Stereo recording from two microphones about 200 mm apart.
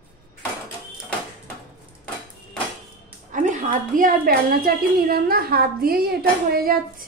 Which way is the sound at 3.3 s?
40° right (ahead or behind).